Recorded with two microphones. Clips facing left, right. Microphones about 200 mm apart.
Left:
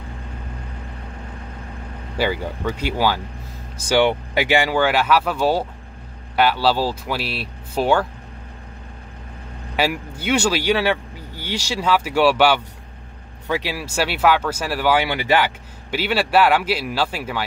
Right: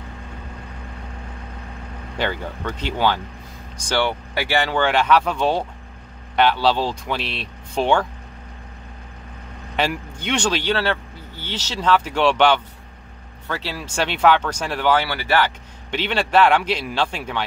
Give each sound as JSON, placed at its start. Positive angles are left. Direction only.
{"t": 2.1, "sound": "speech", "side_deg": 10}
{"t": 9.8, "sound": "speech", "side_deg": 5}